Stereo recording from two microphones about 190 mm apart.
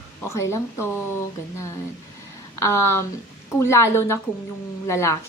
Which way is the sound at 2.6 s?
15° left (ahead or behind).